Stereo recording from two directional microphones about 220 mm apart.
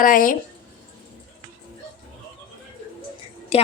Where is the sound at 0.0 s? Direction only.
40° left (ahead or behind).